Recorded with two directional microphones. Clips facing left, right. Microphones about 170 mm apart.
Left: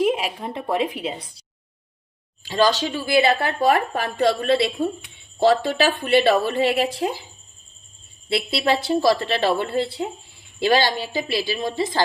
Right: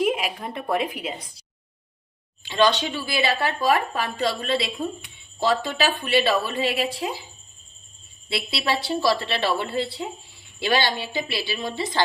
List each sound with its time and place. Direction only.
0.0 s a woman's voice: 30° left (ahead or behind)
2.4 s speech: 40° left (ahead or behind)
8.3 s speech: 50° left (ahead or behind)